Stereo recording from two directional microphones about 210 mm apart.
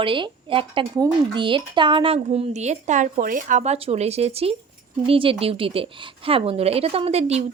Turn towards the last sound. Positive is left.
turn(degrees=-30)  # may be behind; listen again after turning